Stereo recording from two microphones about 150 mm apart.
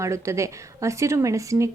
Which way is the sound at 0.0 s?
20° right (ahead or behind).